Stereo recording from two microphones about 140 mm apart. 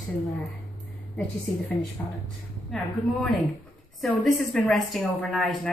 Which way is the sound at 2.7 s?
Centre (ahead or behind).